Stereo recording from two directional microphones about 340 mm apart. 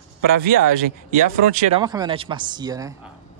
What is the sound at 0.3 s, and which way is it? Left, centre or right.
Speech, right.